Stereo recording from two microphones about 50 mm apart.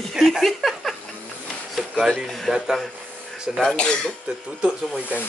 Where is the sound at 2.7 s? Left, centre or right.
Centre.